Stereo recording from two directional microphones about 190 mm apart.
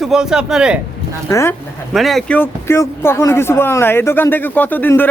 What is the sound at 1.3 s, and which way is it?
Speech, 15° left (ahead or behind).